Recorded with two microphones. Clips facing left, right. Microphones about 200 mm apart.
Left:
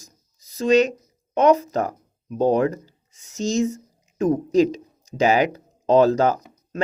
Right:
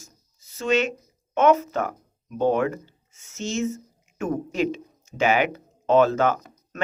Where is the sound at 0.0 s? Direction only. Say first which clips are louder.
Right 1 dB; 35° left (ahead or behind).